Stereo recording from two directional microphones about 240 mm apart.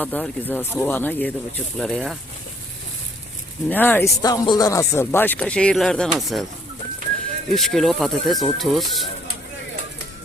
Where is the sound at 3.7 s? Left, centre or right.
Centre.